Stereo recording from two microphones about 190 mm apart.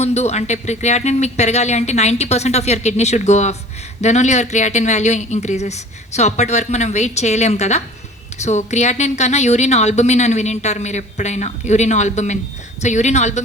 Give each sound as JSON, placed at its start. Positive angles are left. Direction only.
{"t": 0.0, "sound": "a woman's voice", "side_deg": 35}